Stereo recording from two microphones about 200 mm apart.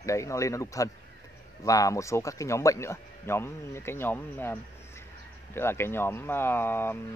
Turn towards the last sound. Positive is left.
turn(degrees=10)  # may be behind; listen again after turning